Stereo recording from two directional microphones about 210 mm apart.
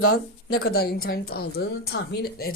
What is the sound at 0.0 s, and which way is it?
A woman's voice, 50° left (ahead or behind).